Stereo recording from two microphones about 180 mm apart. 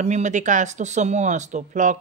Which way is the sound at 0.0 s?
40° right (ahead or behind).